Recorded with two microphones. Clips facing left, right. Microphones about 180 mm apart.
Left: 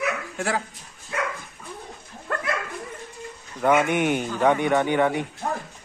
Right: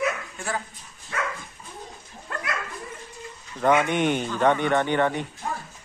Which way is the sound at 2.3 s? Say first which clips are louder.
Left 5 dB; 55° left (ahead or behind).